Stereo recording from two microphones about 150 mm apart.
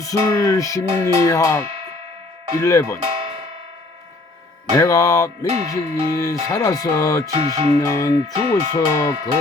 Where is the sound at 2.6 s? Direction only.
20° left (ahead or behind).